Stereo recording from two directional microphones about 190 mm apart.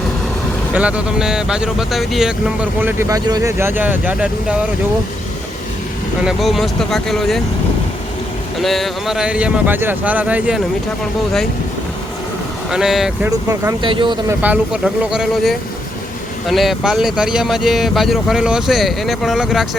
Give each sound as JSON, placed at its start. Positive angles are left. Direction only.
{"t": 0.7, "sound": "speech", "side_deg": -5}
{"t": 6.2, "sound": "speech", "side_deg": 0}
{"t": 8.6, "sound": "speech", "side_deg": 0}
{"t": 12.7, "sound": "speech", "side_deg": 0}
{"t": 13.5, "sound": "speech", "side_deg": -20}
{"t": 14.4, "sound": "speech", "side_deg": -5}